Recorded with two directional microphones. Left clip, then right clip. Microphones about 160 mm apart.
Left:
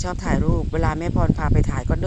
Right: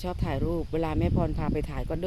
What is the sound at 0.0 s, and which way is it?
Speech, 10° right (ahead or behind).